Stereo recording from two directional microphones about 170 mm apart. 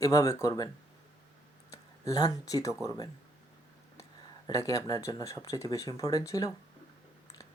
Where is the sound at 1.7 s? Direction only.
20° left (ahead or behind).